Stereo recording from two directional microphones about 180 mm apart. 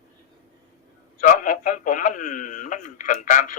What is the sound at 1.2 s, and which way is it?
Speech, 45° left (ahead or behind).